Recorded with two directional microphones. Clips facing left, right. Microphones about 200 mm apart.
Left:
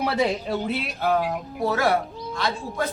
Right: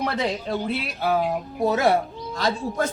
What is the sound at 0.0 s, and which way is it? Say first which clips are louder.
Speech: left 2 dB; 5° left (ahead or behind).